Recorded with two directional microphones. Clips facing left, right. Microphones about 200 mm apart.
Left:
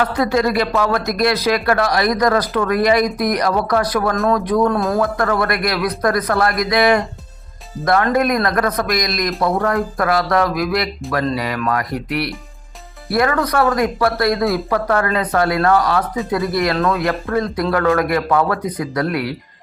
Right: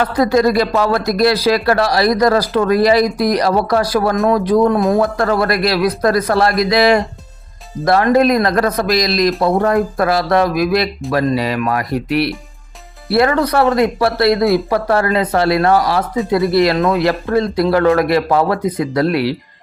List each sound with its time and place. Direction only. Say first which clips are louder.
0.0 s speech: right 4 dB; 35° right (ahead or behind)
8.1 s speech: right 4 dB; 30° right (ahead or behind)
16.7 s speech: right 3 dB; 15° right (ahead or behind)
17.0 s speech: right 4 dB; 30° right (ahead or behind)